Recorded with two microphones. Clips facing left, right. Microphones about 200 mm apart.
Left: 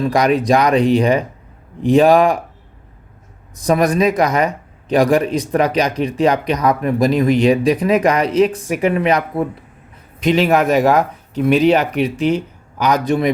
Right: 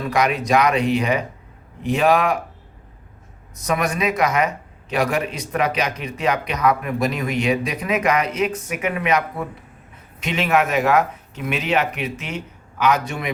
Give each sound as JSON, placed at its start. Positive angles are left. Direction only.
{"t": 0.1, "sound": "speech", "side_deg": 35}
{"t": 3.5, "sound": "speech", "side_deg": 35}